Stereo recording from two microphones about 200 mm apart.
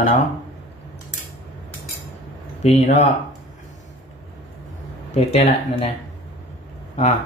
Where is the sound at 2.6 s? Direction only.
35° left (ahead or behind).